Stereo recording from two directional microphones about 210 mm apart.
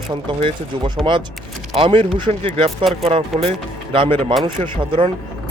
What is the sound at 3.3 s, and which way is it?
Speech, centre (ahead or behind).